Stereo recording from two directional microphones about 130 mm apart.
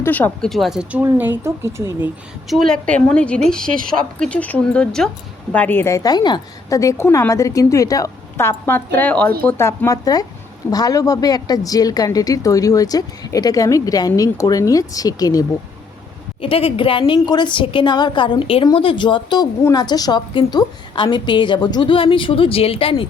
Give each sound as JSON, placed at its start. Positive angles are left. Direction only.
{"t": 0.0, "sound": "speech", "side_deg": 10}
{"t": 0.5, "sound": "speech", "side_deg": 0}
{"t": 2.5, "sound": "a woman's voice", "side_deg": 5}
{"t": 16.4, "sound": "a woman's voice", "side_deg": 45}